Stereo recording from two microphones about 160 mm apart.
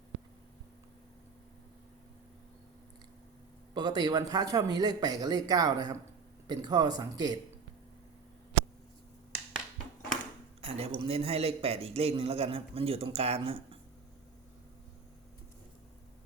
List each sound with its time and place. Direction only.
3.8 s speech: 25° right (ahead or behind)
10.6 s a man's voice: 40° right (ahead or behind)